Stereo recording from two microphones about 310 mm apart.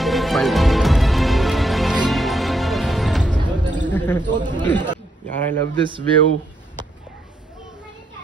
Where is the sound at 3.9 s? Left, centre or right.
Centre.